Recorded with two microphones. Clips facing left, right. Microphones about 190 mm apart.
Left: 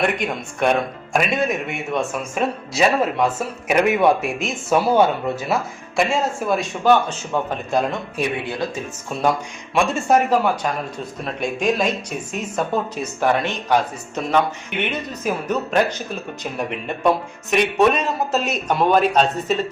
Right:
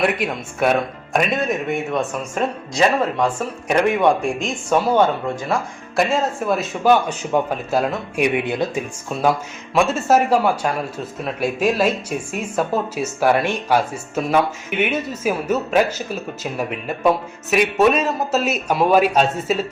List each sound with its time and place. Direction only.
0.0 s speech: 5° right (ahead or behind)
8.2 s speech: 20° right (ahead or behind)
9.7 s a man's voice: 5° right (ahead or behind)